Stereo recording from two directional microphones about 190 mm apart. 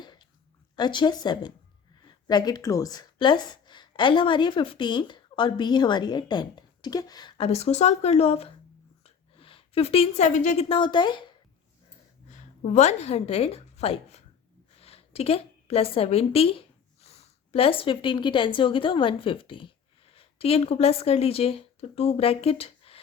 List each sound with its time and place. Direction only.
0.0 s a sound: 25° left (ahead or behind)
0.8 s a woman's voice: 25° left (ahead or behind)
12.3 s a woman's voice: 40° left (ahead or behind)